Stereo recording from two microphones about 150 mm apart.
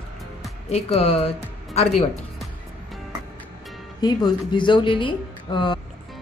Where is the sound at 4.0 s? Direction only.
25° left (ahead or behind).